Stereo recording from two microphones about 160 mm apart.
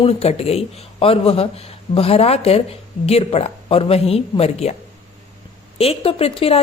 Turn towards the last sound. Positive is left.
turn(degrees=35)  # may be behind; listen again after turning